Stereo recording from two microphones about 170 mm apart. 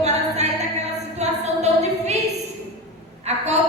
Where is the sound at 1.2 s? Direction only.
40° right (ahead or behind).